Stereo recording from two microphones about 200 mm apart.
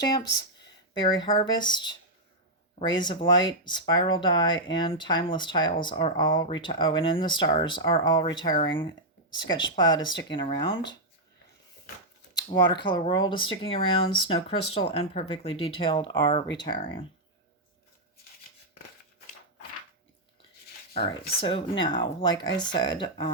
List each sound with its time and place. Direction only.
0.0 s speech: 20° left (ahead or behind)
12.5 s speech: 20° left (ahead or behind)
20.9 s speech: 25° left (ahead or behind)